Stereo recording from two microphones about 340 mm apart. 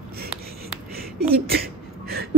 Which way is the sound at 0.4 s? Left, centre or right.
Right.